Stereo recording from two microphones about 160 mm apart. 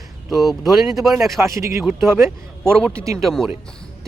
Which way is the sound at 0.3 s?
Centre (ahead or behind).